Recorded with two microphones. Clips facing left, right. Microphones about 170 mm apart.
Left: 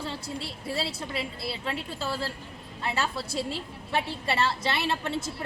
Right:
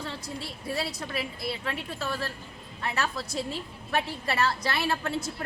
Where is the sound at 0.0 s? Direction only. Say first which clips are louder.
Left 2 dB; 30° left (ahead or behind).